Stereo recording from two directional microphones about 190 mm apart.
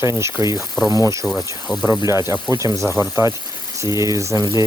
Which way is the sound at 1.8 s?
15° right (ahead or behind).